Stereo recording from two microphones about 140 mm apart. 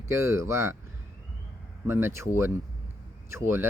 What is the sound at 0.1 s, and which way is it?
Speech, 20° right (ahead or behind).